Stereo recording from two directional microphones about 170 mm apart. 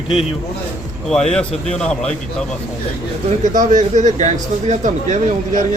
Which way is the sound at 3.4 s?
45° right (ahead or behind).